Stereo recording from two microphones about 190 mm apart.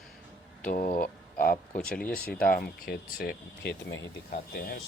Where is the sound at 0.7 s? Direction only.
45° left (ahead or behind).